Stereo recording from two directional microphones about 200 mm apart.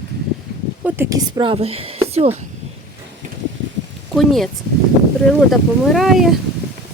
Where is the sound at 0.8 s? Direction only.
15° right (ahead or behind); by 2.3 s 30° right (ahead or behind).